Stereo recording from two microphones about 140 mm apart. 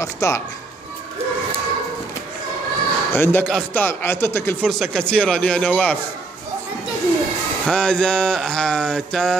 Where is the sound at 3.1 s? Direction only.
15° left (ahead or behind).